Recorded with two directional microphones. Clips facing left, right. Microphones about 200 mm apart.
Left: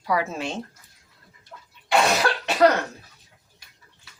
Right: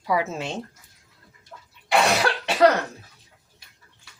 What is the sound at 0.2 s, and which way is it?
Speech, 20° right (ahead or behind).